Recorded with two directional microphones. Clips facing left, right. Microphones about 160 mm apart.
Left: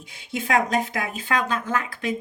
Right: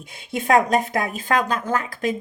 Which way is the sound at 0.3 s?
45° right (ahead or behind).